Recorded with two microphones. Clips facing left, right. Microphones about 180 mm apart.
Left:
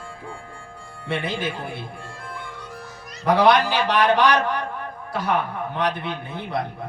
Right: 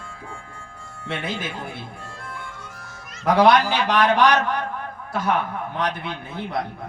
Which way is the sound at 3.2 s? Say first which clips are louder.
Right 1 dB; 45° right (ahead or behind).